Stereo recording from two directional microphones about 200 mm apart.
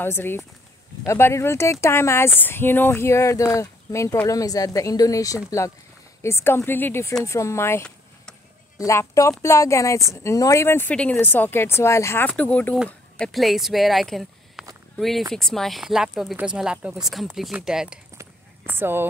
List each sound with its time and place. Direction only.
0.0 s a woman's voice: 10° left (ahead or behind); by 19.0 s 10° right (ahead or behind)